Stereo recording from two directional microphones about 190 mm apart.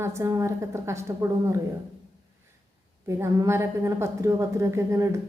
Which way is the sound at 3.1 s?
15° right (ahead or behind).